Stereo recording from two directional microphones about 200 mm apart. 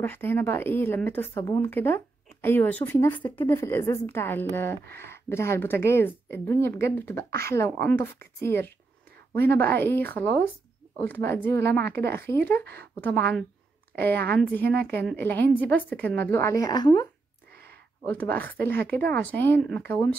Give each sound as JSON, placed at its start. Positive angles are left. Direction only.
{"t": 0.0, "sound": "a woman's voice", "side_deg": 10}
{"t": 13.1, "sound": "speech", "side_deg": -55}
{"t": 15.1, "sound": "a woman's voice", "side_deg": 10}
{"t": 18.0, "sound": "a woman's voice", "side_deg": 10}